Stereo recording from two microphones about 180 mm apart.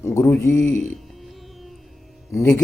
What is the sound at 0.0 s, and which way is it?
Speech, 15° left (ahead or behind).